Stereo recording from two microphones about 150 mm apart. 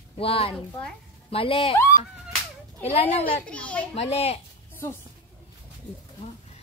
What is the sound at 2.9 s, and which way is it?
Speech, 40° left (ahead or behind).